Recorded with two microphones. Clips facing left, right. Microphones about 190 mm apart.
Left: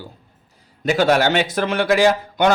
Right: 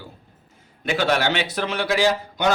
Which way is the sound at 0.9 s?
45° left (ahead or behind).